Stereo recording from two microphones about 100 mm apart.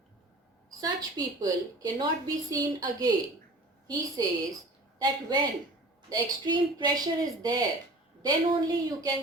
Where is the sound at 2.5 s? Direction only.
40° right (ahead or behind).